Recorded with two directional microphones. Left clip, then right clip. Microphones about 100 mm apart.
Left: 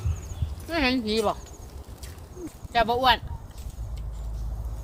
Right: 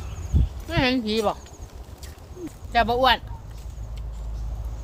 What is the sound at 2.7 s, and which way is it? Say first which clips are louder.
Speech: right 2 dB; 35° right (ahead or behind).